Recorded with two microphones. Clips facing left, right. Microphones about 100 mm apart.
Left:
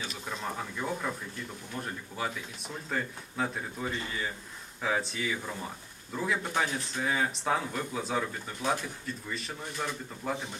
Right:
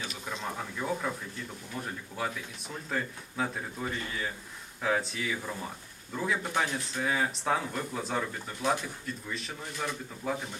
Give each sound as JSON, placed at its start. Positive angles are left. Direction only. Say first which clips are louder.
{"t": 0.0, "sound": "speech", "louder": "even", "side_deg": 0}